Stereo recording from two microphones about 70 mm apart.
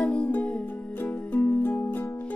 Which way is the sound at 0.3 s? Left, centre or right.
Left.